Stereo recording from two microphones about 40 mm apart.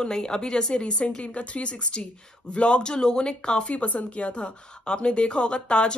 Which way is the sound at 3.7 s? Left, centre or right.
Left.